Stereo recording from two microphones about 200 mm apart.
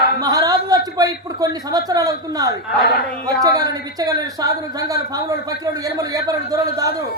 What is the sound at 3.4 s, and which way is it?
A man's voice, 20° right (ahead or behind).